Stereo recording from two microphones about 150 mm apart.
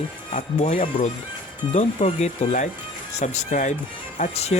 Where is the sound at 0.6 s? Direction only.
45° left (ahead or behind).